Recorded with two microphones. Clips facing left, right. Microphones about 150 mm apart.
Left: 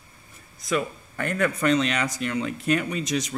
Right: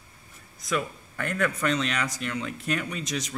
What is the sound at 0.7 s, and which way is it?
Speech, 5° left (ahead or behind).